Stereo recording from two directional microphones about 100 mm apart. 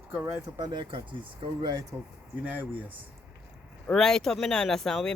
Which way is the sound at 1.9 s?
25° right (ahead or behind).